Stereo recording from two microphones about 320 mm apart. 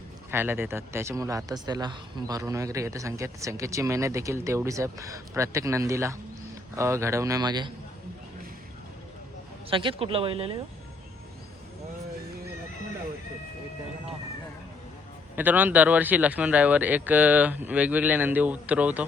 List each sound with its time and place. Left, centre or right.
0.3 s speech: centre
9.6 s speech: centre
15.4 s speech: centre